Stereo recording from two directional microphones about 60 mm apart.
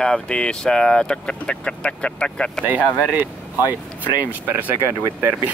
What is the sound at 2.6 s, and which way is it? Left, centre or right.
Speech, right.